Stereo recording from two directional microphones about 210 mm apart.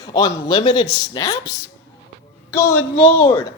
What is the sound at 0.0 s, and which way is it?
A man's voice, 20° left (ahead or behind).